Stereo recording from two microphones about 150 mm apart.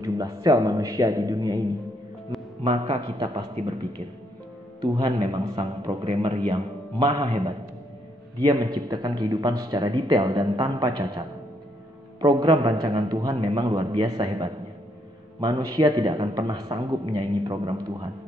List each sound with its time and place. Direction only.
0.0 s speech: 25° right (ahead or behind)
2.6 s speech: 30° right (ahead or behind)
5.3 s speech: 30° right (ahead or behind)
8.4 s speech: 30° right (ahead or behind)